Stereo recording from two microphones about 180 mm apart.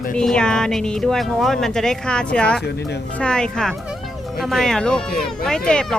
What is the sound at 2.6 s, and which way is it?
Speech, 65° left (ahead or behind).